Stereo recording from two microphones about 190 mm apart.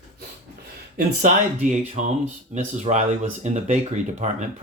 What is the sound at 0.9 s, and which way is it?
Speech, 45° right (ahead or behind).